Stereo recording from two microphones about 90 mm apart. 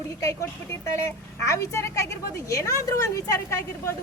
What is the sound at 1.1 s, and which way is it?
A woman's voice, 35° left (ahead or behind).